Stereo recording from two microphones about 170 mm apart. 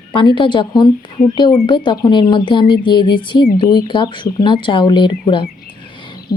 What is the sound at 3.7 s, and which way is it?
Speech, 25° left (ahead or behind).